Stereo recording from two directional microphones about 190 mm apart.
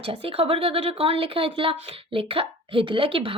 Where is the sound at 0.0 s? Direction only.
30° right (ahead or behind).